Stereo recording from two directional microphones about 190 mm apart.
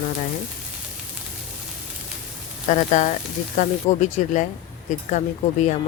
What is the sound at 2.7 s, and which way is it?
Speech, 40° left (ahead or behind).